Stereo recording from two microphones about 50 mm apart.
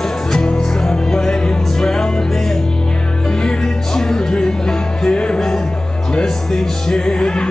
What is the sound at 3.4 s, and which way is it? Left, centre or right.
Music, centre.